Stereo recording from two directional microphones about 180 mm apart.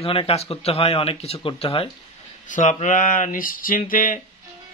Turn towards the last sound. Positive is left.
turn(degrees=50)  # may be behind; listen again after turning